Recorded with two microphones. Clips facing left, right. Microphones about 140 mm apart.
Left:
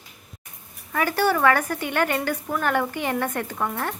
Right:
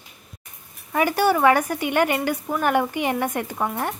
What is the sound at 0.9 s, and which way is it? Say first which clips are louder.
A woman's voice: right 2 dB; 15° right (ahead or behind).